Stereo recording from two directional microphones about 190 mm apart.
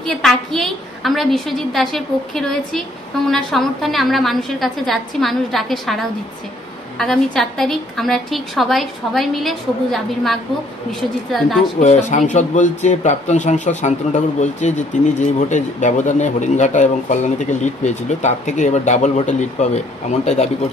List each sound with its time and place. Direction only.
0.0 s a woman's voice: centre (ahead or behind)
11.8 s a man's voice: 40° left (ahead or behind)